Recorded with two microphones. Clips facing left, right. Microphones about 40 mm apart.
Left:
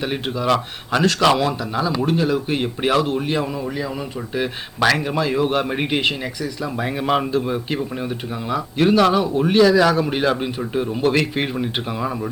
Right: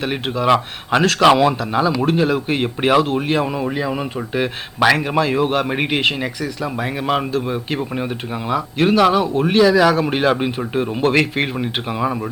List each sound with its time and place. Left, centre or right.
0.0 s a man's voice: centre
4.4 s speech: centre
6.0 s a man's voice: centre